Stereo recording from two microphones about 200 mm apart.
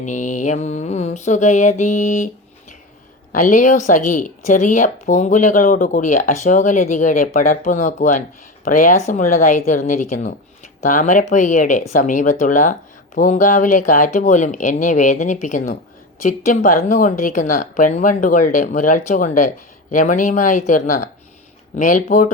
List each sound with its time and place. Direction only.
0.0 s speech: 40° left (ahead or behind)